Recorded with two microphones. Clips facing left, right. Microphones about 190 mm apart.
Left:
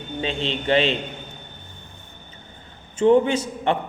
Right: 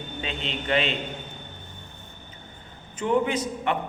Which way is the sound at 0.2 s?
30° left (ahead or behind).